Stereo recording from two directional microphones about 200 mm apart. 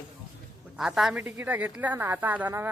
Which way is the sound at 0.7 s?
Centre (ahead or behind).